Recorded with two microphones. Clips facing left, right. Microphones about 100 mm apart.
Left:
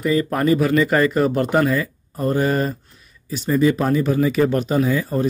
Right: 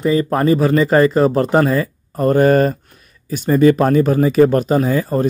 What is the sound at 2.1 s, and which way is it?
Speech, 55° right (ahead or behind).